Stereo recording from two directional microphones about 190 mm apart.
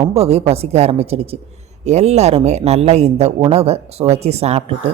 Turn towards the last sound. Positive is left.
turn(degrees=-35)  # may be behind; listen again after turning